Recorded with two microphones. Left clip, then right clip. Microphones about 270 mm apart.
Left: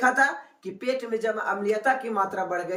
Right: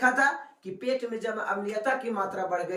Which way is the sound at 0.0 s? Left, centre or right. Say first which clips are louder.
Left 2 dB; centre.